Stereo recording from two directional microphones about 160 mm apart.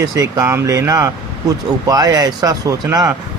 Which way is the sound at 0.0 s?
20° right (ahead or behind).